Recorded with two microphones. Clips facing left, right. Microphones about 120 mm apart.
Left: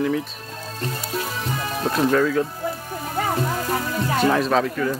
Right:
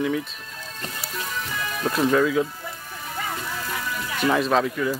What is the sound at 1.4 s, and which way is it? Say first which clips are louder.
Music: left 3 dB; 35° left (ahead or behind).